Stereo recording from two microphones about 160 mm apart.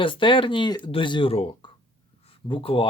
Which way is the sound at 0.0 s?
30° left (ahead or behind).